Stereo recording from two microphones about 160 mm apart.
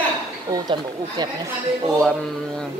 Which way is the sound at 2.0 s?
5° left (ahead or behind).